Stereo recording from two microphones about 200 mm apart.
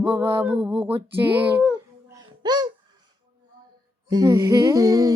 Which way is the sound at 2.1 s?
20° right (ahead or behind).